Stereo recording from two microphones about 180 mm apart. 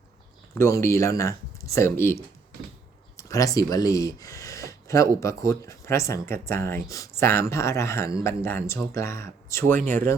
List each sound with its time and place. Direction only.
0.6 s speech: 15° left (ahead or behind)